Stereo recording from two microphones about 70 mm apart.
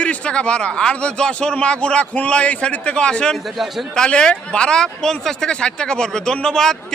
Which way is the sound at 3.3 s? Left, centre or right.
Centre.